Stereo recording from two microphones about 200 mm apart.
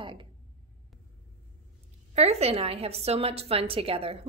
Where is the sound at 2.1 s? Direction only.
30° right (ahead or behind).